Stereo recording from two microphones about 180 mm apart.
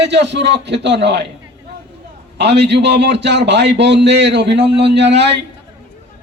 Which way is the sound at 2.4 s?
70° right (ahead or behind).